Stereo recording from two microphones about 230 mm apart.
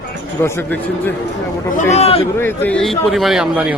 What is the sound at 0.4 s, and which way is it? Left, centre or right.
Speech, centre.